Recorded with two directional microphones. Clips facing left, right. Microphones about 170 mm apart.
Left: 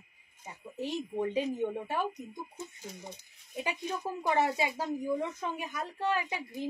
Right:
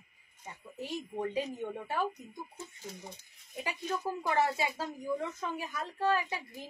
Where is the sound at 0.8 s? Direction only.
20° left (ahead or behind).